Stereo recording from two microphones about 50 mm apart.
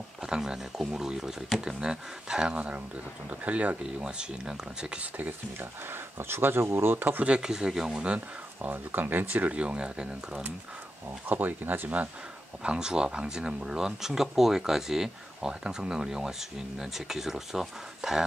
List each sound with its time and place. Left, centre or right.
0.2 s speech: centre; by 3.7 s right
4.0 s speech: centre
5.1 s speech: right
5.9 s speech: right
7.2 s speech: centre
8.6 s speech: right
9.6 s speech: right
11.2 s speech: right
12.6 s speech: centre